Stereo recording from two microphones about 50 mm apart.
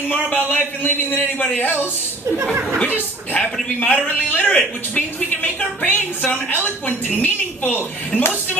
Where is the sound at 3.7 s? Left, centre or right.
Left.